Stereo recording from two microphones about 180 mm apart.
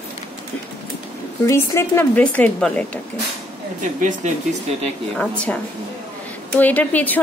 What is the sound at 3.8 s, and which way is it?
Speech, 45° right (ahead or behind).